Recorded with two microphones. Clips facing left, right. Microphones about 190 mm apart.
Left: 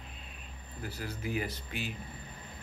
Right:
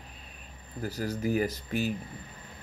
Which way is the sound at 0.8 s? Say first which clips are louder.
Right 8 dB; 40° right (ahead or behind).